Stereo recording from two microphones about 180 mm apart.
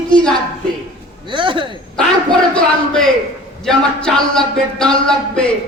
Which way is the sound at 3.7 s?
5° left (ahead or behind).